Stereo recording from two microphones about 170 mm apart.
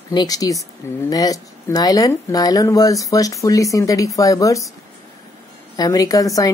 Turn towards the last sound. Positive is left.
turn(degrees=20)  # may be behind; listen again after turning